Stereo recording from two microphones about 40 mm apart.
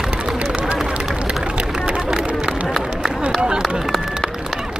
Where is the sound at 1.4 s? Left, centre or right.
Right.